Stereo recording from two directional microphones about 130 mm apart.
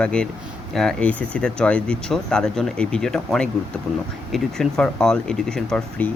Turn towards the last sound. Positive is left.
turn(degrees=5)  # may be behind; listen again after turning